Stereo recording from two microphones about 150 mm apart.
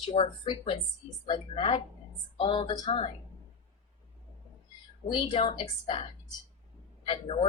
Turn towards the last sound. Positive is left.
turn(degrees=35)  # may be behind; listen again after turning